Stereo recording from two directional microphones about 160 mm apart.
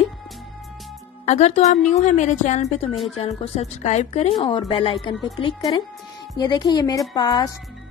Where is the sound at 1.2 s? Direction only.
45° left (ahead or behind).